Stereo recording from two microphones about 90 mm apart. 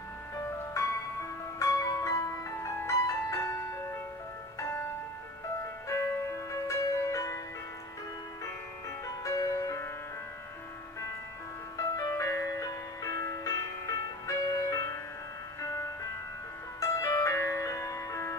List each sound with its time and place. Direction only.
1.6 s music: 40° left (ahead or behind)
9.2 s music: 35° left (ahead or behind)
11.7 s music: 40° left (ahead or behind)